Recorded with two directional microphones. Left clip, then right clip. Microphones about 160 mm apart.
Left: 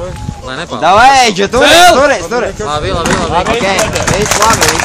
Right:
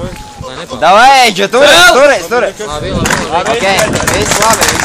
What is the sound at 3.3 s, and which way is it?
Speech, 45° right (ahead or behind).